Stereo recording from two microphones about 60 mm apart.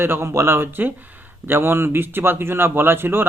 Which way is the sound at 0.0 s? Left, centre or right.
Right.